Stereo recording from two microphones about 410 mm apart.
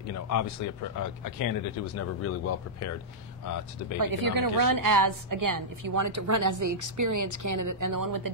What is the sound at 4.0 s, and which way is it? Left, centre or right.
A woman's voice, right.